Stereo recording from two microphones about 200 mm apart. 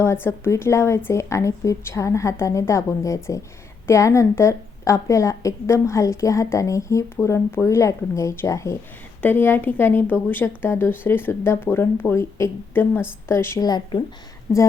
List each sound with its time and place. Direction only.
0.0 s a woman's voice: 15° left (ahead or behind)